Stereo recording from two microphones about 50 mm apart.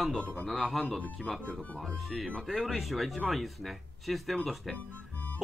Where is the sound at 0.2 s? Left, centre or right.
Left.